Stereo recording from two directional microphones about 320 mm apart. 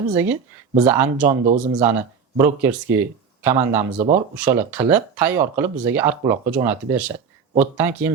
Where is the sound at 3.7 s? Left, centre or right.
Right.